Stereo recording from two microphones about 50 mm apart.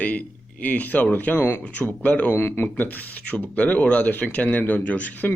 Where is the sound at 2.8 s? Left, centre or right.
Left.